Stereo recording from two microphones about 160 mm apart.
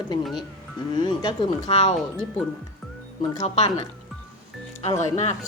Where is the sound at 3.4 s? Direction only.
40° left (ahead or behind).